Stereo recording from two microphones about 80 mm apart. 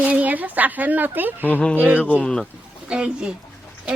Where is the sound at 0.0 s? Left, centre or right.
Centre.